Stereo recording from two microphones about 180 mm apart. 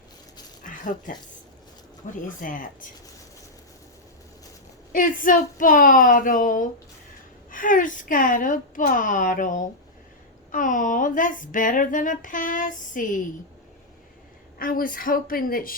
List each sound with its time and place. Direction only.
0.6 s a sound: 45° left (ahead or behind)
2.0 s speech: 45° left (ahead or behind)
4.9 s speech: 45° left (ahead or behind)
14.6 s speech: 50° left (ahead or behind)